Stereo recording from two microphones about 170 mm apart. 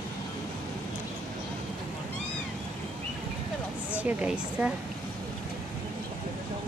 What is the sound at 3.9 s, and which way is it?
Speech, 10° right (ahead or behind).